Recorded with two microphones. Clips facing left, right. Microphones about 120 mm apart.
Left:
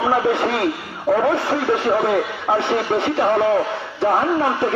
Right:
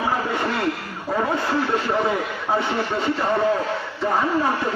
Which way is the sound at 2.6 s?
75° left (ahead or behind).